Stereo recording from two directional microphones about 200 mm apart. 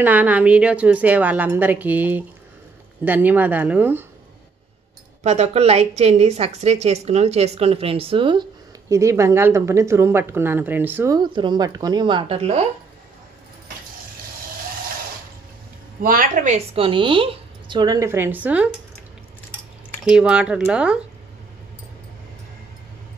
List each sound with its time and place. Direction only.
0.0 s a woman's voice: 10° right (ahead or behind)
5.2 s a woman's voice: 35° right (ahead or behind); by 11.1 s 10° right (ahead or behind)
11.1 s a woman's voice: 25° right (ahead or behind)
16.0 s a woman's voice: 45° right (ahead or behind); by 18.8 s 5° right (ahead or behind)
20.1 s speech: 5° right (ahead or behind)